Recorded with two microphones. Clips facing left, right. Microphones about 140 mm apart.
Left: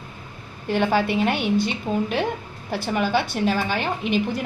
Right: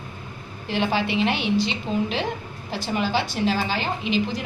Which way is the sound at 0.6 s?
50° left (ahead or behind).